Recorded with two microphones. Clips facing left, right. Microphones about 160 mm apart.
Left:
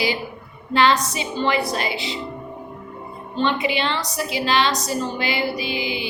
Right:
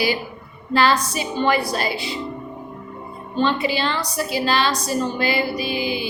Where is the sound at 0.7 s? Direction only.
20° left (ahead or behind).